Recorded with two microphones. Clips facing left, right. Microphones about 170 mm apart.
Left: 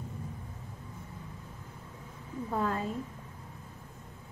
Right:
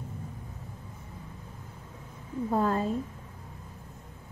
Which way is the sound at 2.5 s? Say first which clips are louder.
Right 5 dB; 35° right (ahead or behind).